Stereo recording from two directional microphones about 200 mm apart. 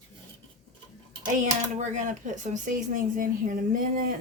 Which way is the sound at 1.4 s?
35° right (ahead or behind).